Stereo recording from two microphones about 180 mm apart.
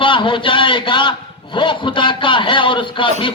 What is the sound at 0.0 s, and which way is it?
A man's voice, 30° left (ahead or behind).